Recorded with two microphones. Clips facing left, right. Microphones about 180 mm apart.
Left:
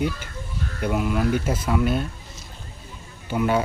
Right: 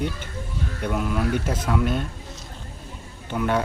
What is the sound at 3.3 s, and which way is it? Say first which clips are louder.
Speech: left 2 dB; 5° left (ahead or behind).